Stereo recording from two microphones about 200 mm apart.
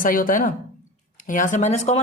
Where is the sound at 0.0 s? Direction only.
45° left (ahead or behind).